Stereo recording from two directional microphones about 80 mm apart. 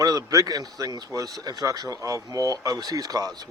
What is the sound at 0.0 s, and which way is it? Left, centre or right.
A man's voice, right.